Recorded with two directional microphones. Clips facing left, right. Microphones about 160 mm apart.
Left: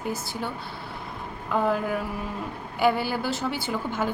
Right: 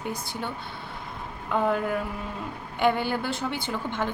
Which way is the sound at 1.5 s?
Centre (ahead or behind).